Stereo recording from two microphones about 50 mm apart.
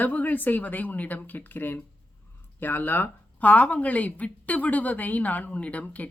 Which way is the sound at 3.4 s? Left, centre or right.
Left.